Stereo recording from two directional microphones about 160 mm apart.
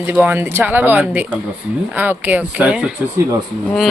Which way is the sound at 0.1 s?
10° right (ahead or behind).